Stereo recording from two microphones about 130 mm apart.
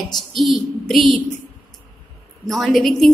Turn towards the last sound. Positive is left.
turn(degrees=0)  # may be behind; listen again after turning